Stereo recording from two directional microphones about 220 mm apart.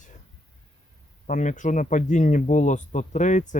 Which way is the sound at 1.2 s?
35° left (ahead or behind).